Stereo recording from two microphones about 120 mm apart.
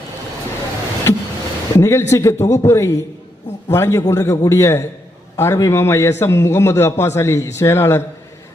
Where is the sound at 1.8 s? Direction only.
25° left (ahead or behind).